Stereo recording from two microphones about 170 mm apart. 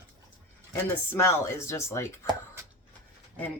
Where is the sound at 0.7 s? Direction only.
15° left (ahead or behind).